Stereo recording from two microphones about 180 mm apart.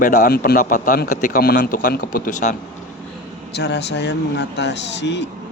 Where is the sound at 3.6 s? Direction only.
70° left (ahead or behind).